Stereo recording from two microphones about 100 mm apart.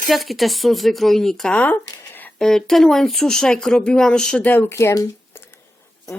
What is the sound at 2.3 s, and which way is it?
Speech, 5° left (ahead or behind).